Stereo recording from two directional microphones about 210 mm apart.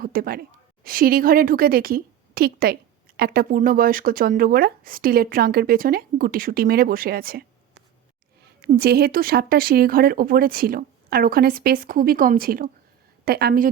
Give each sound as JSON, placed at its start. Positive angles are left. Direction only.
{"t": 0.0, "sound": "speech", "side_deg": -45}
{"t": 8.6, "sound": "speech", "side_deg": -50}